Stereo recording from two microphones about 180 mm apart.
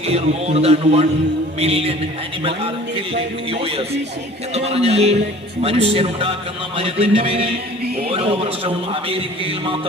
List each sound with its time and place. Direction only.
0.1 s a man's voice: 35° right (ahead or behind)